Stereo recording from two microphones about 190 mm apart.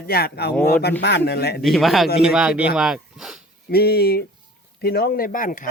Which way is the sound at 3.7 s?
55° left (ahead or behind).